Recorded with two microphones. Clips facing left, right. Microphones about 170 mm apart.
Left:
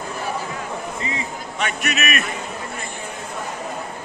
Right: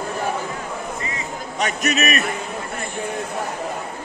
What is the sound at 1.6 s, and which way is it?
Speech, 40° right (ahead or behind).